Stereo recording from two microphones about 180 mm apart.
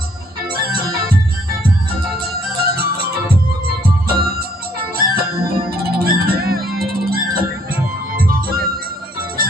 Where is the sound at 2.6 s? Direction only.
55° right (ahead or behind).